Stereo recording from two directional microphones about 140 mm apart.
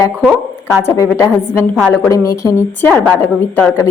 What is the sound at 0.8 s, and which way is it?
A woman's voice, 20° left (ahead or behind).